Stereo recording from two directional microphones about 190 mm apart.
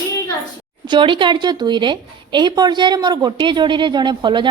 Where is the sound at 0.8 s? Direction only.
25° right (ahead or behind).